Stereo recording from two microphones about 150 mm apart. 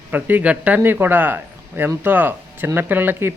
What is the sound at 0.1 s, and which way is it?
Speech, 10° right (ahead or behind).